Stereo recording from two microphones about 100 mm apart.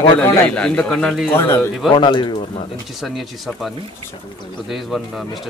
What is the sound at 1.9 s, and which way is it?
Speech, 50° left (ahead or behind).